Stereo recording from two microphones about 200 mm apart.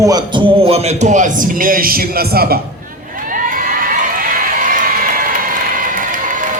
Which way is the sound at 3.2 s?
45° right (ahead or behind).